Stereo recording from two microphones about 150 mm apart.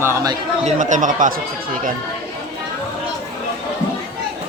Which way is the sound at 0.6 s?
55° right (ahead or behind).